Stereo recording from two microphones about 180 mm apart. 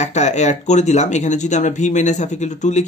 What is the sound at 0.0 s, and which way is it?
Speech, 40° left (ahead or behind).